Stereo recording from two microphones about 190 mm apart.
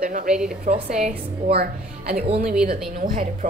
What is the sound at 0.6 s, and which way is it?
Speech, 35° right (ahead or behind).